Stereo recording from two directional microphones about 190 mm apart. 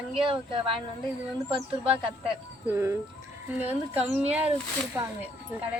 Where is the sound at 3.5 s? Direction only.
10° right (ahead or behind).